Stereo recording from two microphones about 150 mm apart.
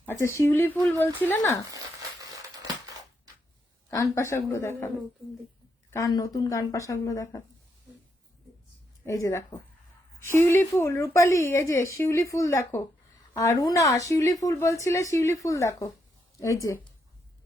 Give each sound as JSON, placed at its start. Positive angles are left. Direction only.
{"t": 0.1, "sound": "speech", "side_deg": 20}
{"t": 4.1, "sound": "speech", "side_deg": 20}
{"t": 5.9, "sound": "a woman's voice", "side_deg": 25}
{"t": 9.0, "sound": "a woman's voice", "side_deg": 20}